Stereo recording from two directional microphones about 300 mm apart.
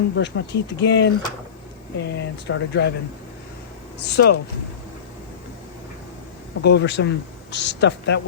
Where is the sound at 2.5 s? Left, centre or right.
Left.